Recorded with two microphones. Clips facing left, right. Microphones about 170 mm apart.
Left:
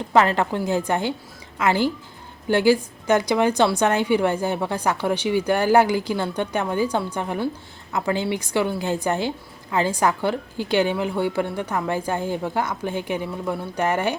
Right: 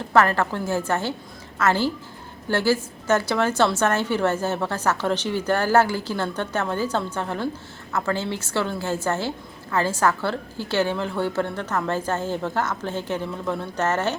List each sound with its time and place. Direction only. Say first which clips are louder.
0.1 s a woman's voice: left 1 dB; 15° left (ahead or behind)